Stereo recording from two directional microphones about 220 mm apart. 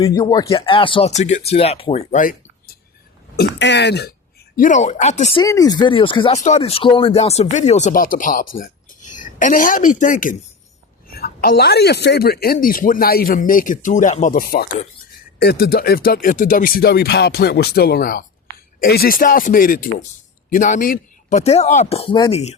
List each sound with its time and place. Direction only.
0.0 s speech: 15° left (ahead or behind); by 2.7 s 35° left (ahead or behind)
3.3 s speech: 50° left (ahead or behind)
4.5 s a woman's voice: 35° left (ahead or behind)
5.4 s a woman's voice: 15° left (ahead or behind)